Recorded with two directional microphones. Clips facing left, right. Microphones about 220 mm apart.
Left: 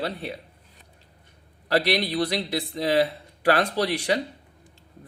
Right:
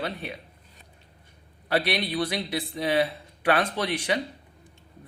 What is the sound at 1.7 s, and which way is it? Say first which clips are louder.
Speech: left 3 dB; 40° left (ahead or behind).